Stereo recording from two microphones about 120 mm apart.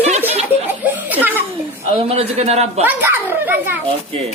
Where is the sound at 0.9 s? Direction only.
15° right (ahead or behind).